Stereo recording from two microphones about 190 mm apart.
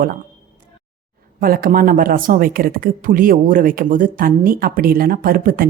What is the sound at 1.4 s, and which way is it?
A woman's voice, 50° right (ahead or behind).